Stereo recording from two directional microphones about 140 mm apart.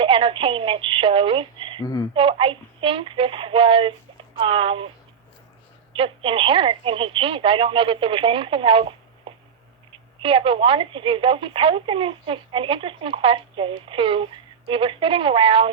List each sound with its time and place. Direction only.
0.0 s a woman's voice: 40° right (ahead or behind)
1.8 s speech: 25° left (ahead or behind)
2.1 s a woman's voice: 40° right (ahead or behind)
6.0 s a woman's voice: 40° right (ahead or behind)